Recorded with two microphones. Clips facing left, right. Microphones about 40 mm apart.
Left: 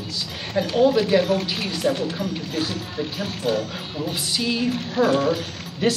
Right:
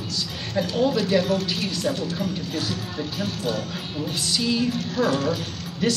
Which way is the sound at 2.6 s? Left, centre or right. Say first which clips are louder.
Left 2 dB; centre.